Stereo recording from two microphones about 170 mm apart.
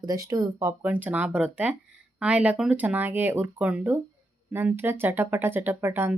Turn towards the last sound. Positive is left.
turn(degrees=-15)  # may be behind; listen again after turning